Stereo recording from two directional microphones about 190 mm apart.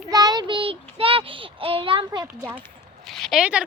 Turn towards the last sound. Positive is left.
turn(degrees=-5)  # may be behind; listen again after turning